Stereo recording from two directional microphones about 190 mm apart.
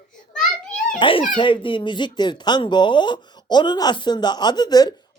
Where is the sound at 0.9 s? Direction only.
25° left (ahead or behind).